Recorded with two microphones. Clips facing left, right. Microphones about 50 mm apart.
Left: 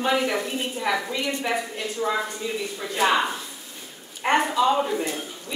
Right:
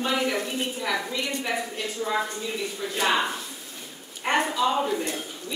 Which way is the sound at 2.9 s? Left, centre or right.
Centre.